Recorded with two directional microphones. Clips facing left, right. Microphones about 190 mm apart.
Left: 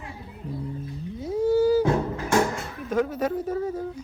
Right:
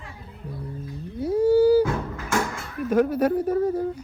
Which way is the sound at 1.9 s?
30° left (ahead or behind).